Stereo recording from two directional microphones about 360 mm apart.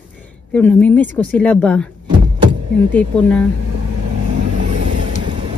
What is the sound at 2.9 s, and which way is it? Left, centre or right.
Speech, centre.